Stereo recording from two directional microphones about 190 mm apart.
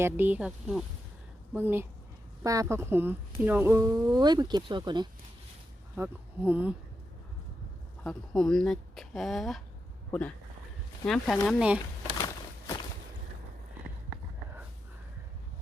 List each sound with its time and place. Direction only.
0.0 s speech: 10° right (ahead or behind)
6.0 s speech: 10° right (ahead or behind)
8.0 s speech: 5° left (ahead or behind)